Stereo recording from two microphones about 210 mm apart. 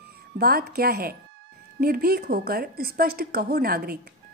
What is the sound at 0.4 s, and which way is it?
A woman's voice, 45° right (ahead or behind).